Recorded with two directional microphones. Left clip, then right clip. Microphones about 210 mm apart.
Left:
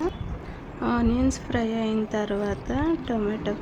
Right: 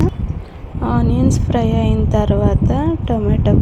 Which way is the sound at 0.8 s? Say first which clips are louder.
Right 6 dB; 15° right (ahead or behind).